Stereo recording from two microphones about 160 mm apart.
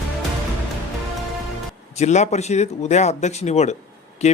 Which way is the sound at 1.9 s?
45° left (ahead or behind).